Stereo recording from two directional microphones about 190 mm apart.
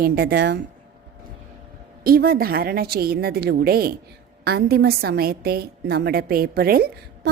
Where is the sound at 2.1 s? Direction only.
50° right (ahead or behind).